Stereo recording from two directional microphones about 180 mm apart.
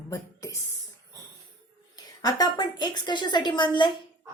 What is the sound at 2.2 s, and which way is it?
A woman's voice, 20° left (ahead or behind).